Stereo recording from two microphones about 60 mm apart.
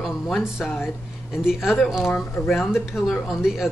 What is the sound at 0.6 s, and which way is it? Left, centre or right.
Speech, centre.